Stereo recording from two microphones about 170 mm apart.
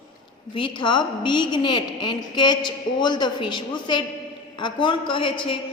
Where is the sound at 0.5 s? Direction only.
30° left (ahead or behind).